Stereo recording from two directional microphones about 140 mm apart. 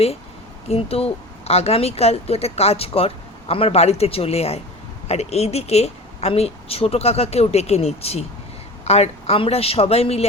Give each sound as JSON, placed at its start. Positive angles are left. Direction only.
{"t": 0.7, "sound": "speech", "side_deg": 45}